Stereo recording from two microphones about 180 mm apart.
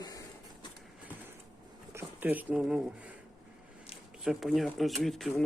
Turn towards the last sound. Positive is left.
turn(degrees=0)  # may be behind; listen again after turning